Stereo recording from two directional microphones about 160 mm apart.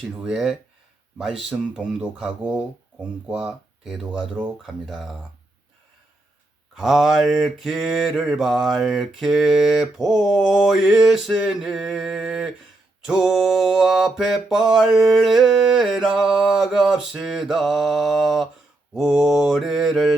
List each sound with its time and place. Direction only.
0.0 s mantra: 5° right (ahead or behind)
6.7 s mantra: centre (ahead or behind)